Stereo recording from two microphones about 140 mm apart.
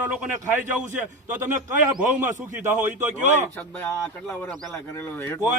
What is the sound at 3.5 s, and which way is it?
Speech, 10° left (ahead or behind).